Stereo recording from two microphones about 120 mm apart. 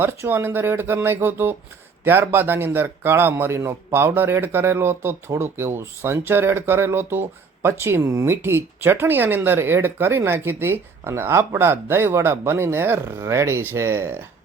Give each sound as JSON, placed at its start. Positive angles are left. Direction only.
{"t": 0.0, "sound": "speech", "side_deg": -20}